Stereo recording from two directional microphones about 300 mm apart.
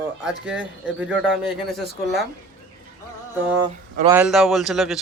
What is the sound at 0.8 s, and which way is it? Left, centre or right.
Speech, centre.